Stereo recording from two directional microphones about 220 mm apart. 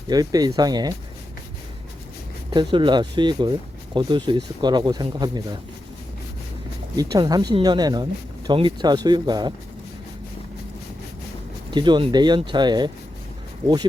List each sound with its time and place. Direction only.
0.1 s speech: 15° right (ahead or behind)
2.5 s speech: 20° right (ahead or behind)
6.9 s speech: 15° right (ahead or behind)
11.7 s speech: 20° right (ahead or behind)